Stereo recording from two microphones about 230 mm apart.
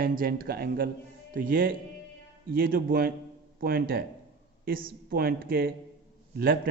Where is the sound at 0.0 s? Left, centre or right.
Right.